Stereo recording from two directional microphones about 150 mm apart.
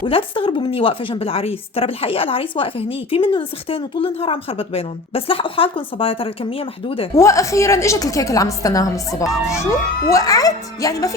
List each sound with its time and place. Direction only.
0.0 s speech: 35° left (ahead or behind)
7.2 s a woman's voice: 20° left (ahead or behind)